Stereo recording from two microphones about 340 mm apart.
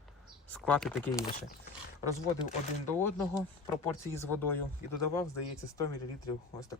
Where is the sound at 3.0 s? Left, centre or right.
Centre.